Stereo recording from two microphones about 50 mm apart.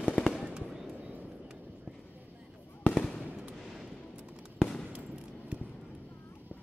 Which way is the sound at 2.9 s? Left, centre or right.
Centre.